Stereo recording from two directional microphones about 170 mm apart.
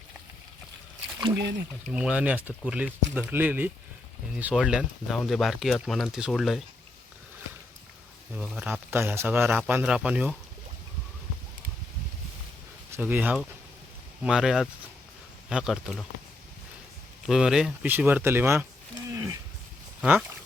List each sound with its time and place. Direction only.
1.4 s speech: 75° right (ahead or behind)
1.9 s speech: 5° right (ahead or behind)
8.4 s speech: 10° right (ahead or behind)
12.9 s speech: 10° right (ahead or behind)
17.2 s speech: 5° right (ahead or behind)
19.1 s a sound: 15° right (ahead or behind)
20.0 s speech: 10° right (ahead or behind)